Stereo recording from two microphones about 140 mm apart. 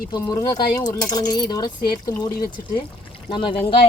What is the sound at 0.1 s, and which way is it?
Speech, 25° left (ahead or behind).